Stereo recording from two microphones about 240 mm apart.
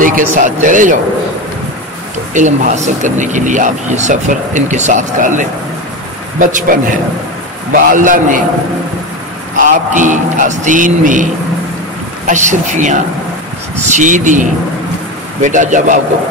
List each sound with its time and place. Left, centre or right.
0.0 s speech: right
2.3 s speech: right
9.6 s speech: right
12.3 s speech: right